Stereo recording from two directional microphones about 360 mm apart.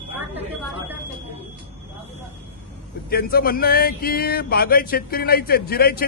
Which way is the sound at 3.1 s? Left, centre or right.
Left.